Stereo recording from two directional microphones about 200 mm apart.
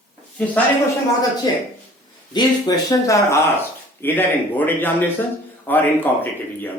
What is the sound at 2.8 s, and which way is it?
A man's voice, 15° left (ahead or behind).